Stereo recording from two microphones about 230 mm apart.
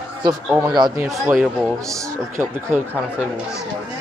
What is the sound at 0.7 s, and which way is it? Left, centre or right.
Speech, centre.